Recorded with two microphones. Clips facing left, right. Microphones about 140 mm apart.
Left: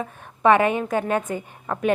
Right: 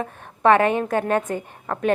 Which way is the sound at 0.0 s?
5° left (ahead or behind).